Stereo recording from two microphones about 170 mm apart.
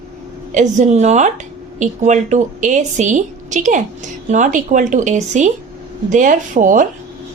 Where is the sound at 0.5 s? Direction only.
45° right (ahead or behind).